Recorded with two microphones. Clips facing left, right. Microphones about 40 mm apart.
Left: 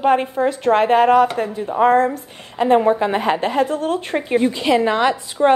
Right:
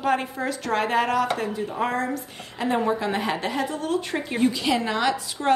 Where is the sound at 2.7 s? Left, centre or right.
Left.